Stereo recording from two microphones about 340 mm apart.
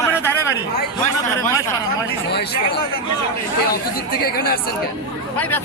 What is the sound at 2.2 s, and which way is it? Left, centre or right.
Speech, left.